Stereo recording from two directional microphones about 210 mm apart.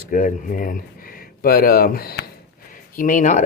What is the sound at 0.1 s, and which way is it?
Speech, 40° left (ahead or behind).